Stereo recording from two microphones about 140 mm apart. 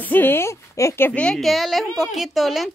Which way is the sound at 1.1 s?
5° left (ahead or behind).